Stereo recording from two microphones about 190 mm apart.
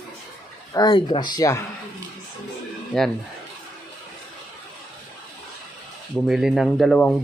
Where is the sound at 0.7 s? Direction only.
20° left (ahead or behind).